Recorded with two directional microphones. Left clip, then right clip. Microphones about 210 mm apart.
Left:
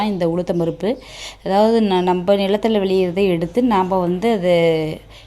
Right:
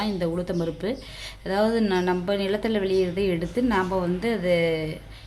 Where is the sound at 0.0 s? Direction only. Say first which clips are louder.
Left 8 dB; 30° left (ahead or behind).